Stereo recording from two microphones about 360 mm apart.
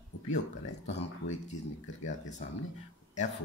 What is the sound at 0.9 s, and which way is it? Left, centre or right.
Speech, centre.